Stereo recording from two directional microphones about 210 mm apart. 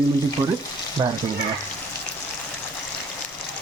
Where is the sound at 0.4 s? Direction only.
15° right (ahead or behind).